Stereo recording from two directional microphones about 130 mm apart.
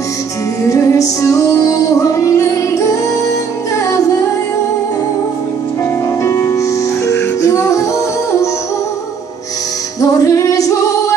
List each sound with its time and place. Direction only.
0.7 s music: 25° left (ahead or behind)
6.2 s music: 25° left (ahead or behind)
9.9 s music: 25° left (ahead or behind)